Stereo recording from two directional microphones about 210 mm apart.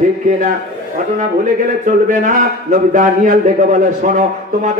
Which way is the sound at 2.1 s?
40° right (ahead or behind).